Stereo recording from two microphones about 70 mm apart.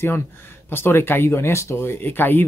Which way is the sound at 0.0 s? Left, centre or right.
Left.